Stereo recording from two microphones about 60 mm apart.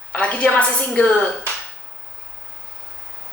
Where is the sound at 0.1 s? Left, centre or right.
Left.